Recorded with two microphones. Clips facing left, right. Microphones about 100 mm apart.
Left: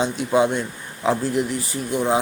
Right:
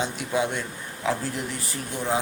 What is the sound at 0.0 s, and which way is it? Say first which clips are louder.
Speech: left 7 dB; 30° left (ahead or behind).